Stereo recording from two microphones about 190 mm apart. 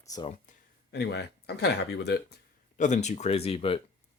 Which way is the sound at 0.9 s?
60° left (ahead or behind).